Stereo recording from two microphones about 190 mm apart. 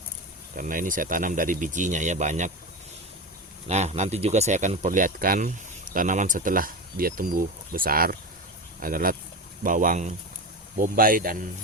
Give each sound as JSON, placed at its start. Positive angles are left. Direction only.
{"t": 0.5, "sound": "speech", "side_deg": -45}
{"t": 3.7, "sound": "speech", "side_deg": -35}